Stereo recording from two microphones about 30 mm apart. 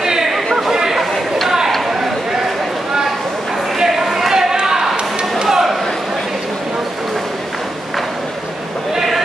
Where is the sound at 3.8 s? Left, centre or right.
Centre.